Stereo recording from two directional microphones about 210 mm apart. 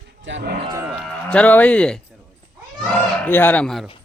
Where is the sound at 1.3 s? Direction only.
5° left (ahead or behind).